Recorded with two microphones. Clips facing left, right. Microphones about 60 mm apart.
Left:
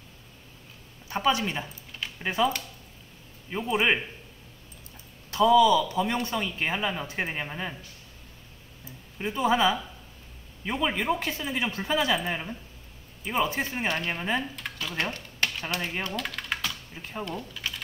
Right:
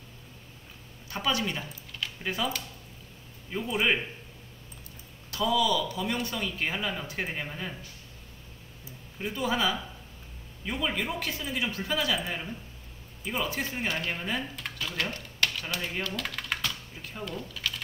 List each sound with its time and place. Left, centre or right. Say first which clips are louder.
1.0 s speech: left 4 dB; left
3.7 s speech: left 3 dB; left
5.3 s speech: left 7 dB; left
9.2 s speech: left 5 dB; left
15.0 s a sound: left 1 dB; left
15.9 s speech: left 1 dB; left
16.2 s typing: left 1 dB; centre
16.9 s speech: left 4 dB; left
17.3 s speech: left 2 dB; centre